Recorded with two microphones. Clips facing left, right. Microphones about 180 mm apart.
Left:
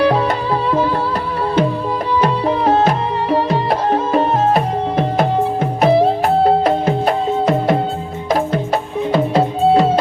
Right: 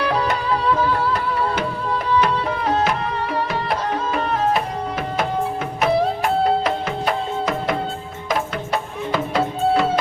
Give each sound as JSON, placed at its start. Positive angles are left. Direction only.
{"t": 2.2, "sound": "music", "side_deg": 35}